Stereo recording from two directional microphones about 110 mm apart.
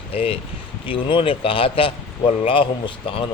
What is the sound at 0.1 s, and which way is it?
A man's voice, 60° left (ahead or behind).